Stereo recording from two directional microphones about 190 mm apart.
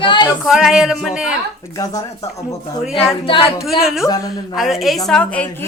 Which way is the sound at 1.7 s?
20° left (ahead or behind).